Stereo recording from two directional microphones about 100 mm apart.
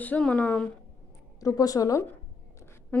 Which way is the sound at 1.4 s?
35° left (ahead or behind).